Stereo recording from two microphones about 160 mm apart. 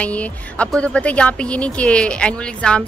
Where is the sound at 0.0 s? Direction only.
10° left (ahead or behind).